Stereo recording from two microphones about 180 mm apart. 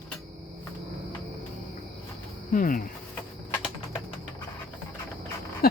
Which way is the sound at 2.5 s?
50° left (ahead or behind).